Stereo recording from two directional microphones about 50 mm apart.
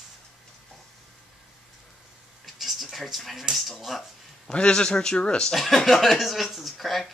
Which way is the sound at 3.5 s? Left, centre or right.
Centre.